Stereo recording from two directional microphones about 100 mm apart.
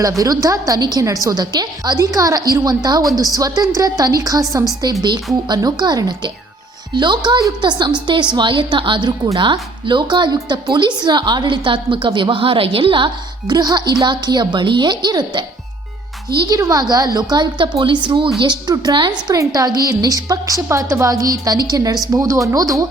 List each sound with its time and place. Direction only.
0.2 s a woman's voice: 35° right (ahead or behind); by 13.1 s 60° right (ahead or behind)
13.5 s speech: 45° right (ahead or behind)
16.6 s a woman's voice: 35° right (ahead or behind)